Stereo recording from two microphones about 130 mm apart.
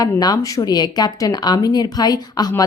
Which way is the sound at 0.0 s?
30° left (ahead or behind).